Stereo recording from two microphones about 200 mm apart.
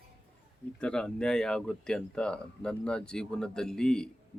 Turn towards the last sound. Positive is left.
turn(degrees=5)  # may be behind; listen again after turning